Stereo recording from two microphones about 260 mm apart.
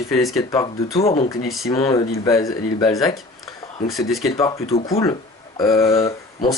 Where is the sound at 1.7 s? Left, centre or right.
Centre.